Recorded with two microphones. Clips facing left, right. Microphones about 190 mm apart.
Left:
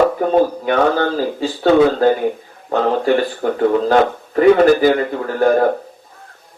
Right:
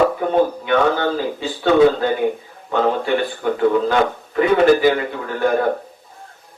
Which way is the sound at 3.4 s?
45° left (ahead or behind).